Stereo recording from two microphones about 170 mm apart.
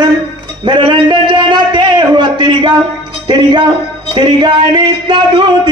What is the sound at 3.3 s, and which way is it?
Speech, 25° right (ahead or behind).